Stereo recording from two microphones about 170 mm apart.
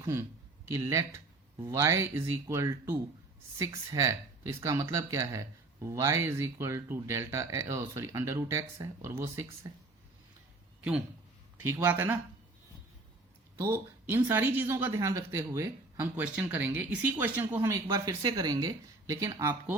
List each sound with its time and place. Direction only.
0.0 s speech: 15° right (ahead or behind)
11.6 s speech: 10° right (ahead or behind)
13.6 s speech: 15° right (ahead or behind)